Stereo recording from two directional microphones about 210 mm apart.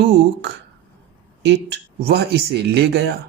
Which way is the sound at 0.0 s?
55° right (ahead or behind).